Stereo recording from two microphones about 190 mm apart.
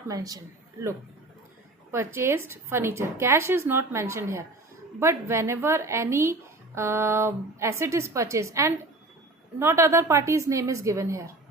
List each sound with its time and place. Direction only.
0.1 s a woman's voice: 20° right (ahead or behind)
1.9 s a woman's voice: 15° right (ahead or behind)